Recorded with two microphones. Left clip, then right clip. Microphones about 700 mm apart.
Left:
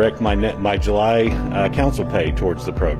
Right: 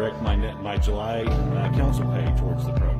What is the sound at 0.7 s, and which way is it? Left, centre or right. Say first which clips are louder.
Speech: left 11 dB; left.